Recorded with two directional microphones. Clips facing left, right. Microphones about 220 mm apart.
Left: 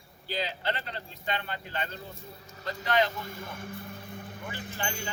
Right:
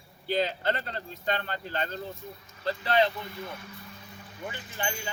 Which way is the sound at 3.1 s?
45° left (ahead or behind).